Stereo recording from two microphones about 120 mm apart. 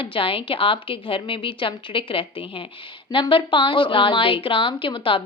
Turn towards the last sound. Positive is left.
turn(degrees=45)  # may be behind; listen again after turning